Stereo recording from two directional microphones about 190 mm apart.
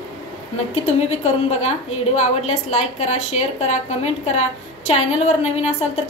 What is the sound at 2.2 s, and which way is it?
A woman's voice, 35° left (ahead or behind).